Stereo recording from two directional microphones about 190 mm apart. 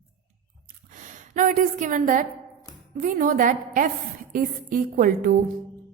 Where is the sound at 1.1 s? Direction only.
40° right (ahead or behind).